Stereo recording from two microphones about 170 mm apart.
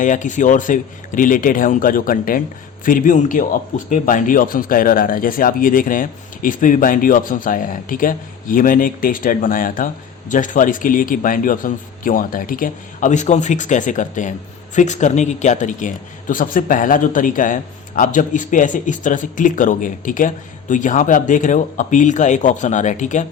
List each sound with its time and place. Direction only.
0.0 s a man's voice: 50° left (ahead or behind)